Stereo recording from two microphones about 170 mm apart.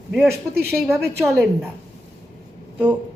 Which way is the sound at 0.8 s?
15° right (ahead or behind).